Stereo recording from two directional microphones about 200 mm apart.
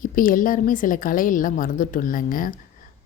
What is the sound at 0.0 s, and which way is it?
A woman's voice, 45° left (ahead or behind).